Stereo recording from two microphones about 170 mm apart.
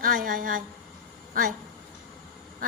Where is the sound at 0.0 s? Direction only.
55° right (ahead or behind).